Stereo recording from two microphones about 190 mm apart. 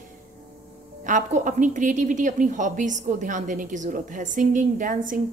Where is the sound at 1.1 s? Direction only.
40° right (ahead or behind).